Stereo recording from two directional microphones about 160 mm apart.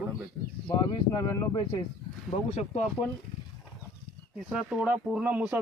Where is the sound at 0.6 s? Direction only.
25° left (ahead or behind).